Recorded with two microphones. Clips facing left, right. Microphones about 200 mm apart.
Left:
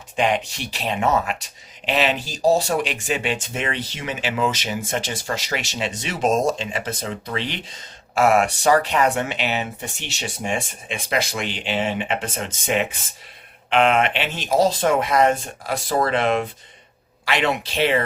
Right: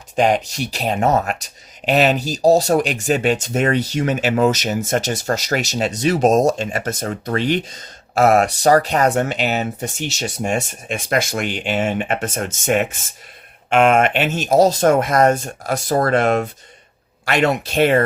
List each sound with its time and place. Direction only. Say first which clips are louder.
0.2 s speech: right 5 dB; 40° right (ahead or behind)